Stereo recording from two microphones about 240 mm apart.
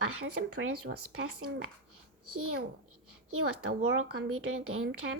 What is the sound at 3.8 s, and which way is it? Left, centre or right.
A woman's voice, right.